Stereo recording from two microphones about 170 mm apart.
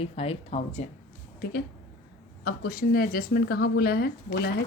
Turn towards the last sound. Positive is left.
turn(degrees=70)  # may be behind; listen again after turning